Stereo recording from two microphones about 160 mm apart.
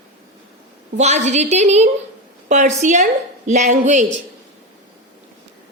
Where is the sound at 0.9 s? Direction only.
45° right (ahead or behind).